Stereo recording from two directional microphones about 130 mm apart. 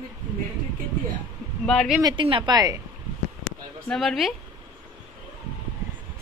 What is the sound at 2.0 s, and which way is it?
Speech, 40° right (ahead or behind).